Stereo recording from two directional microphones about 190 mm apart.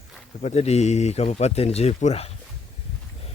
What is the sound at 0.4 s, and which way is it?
Speech, 35° left (ahead or behind).